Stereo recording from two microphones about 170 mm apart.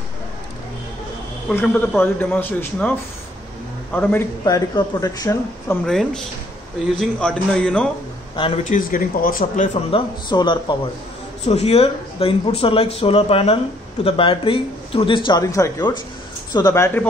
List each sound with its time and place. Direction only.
1.5 s a man's voice: 10° left (ahead or behind)
3.9 s a man's voice: 10° left (ahead or behind)
4.5 s speech: 20° left (ahead or behind)
5.9 s a man's voice: 5° left (ahead or behind)
8.6 s speech: 55° left (ahead or behind)
9.8 s a man's voice: 30° left (ahead or behind)